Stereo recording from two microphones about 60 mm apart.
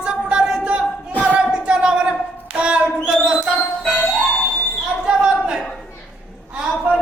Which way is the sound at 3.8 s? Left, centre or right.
Left.